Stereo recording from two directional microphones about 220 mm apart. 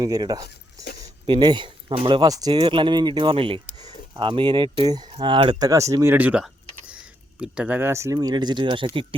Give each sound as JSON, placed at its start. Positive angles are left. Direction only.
{"t": 0.0, "sound": "speech", "side_deg": -15}